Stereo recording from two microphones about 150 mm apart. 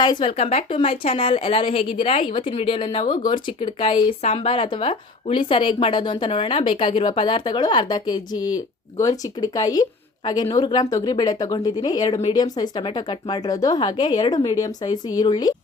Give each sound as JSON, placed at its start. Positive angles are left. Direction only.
{"t": 0.0, "sound": "a woman's voice", "side_deg": 30}